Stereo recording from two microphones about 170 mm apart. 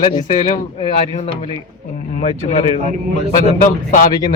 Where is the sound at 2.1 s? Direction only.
40° left (ahead or behind).